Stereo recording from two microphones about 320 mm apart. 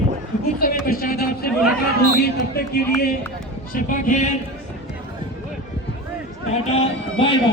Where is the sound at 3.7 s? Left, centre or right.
Left.